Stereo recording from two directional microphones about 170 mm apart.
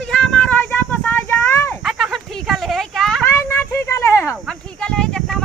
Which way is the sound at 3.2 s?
15° left (ahead or behind).